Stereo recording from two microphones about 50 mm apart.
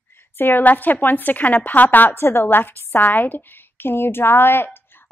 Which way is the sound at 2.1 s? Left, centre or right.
Left.